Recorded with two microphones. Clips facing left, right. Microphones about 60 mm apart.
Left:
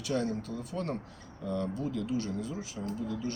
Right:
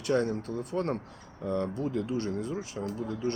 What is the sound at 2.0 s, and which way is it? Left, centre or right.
Speech, right.